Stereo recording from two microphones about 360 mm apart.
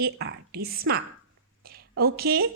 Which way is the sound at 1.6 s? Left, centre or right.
Right.